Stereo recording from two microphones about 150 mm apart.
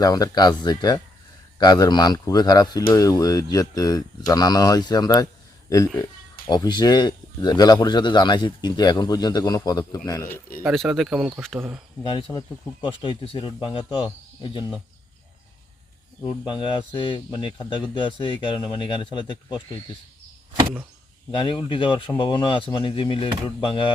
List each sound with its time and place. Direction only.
0.0 s speech: 25° left (ahead or behind)
10.7 s speech: centre (ahead or behind)
12.0 s speech: 30° left (ahead or behind)
16.5 s speech: 30° left (ahead or behind)
21.3 s speech: 35° left (ahead or behind)